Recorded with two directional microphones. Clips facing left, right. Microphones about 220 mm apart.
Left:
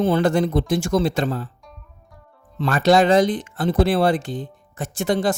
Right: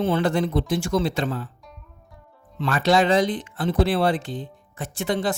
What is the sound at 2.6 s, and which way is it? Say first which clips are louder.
Speech: left 4 dB; 45° left (ahead or behind).